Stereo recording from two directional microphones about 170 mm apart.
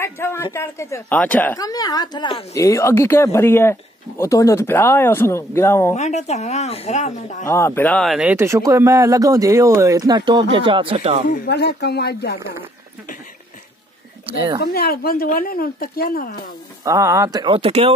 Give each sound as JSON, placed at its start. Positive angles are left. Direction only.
{"t": 0.0, "sound": "speech", "side_deg": 15}
{"t": 1.6, "sound": "speech", "side_deg": 20}
{"t": 5.9, "sound": "a woman's voice", "side_deg": 40}
{"t": 7.4, "sound": "speech", "side_deg": 15}
{"t": 11.2, "sound": "speech", "side_deg": 65}
{"t": 14.6, "sound": "speech", "side_deg": 65}
{"t": 16.8, "sound": "speech", "side_deg": -20}